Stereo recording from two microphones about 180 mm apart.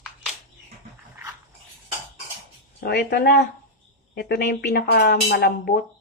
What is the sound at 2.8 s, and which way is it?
Speech, 60° left (ahead or behind).